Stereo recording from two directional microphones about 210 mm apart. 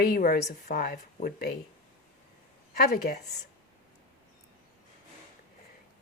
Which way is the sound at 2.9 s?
50° left (ahead or behind).